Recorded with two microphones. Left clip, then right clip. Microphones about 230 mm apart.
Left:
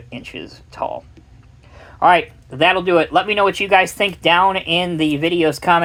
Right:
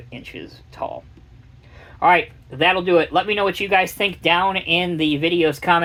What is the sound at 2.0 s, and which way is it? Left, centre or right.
Speech, left.